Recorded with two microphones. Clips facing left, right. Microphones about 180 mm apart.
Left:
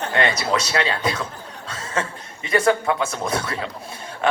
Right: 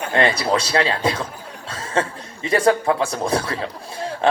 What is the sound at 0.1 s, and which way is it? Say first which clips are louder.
A man's voice: right 3 dB; 30° right (ahead or behind).